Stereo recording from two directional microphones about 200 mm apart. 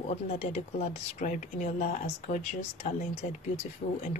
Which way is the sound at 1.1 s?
40° left (ahead or behind).